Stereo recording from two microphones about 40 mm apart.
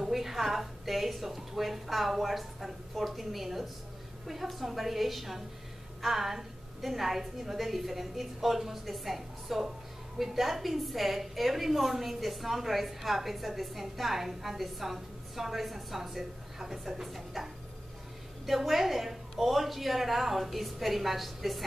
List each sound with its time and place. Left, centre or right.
0.0 s a woman's voice: centre